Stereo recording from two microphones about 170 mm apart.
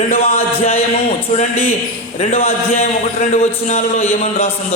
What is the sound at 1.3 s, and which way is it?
A man's voice, 45° left (ahead or behind).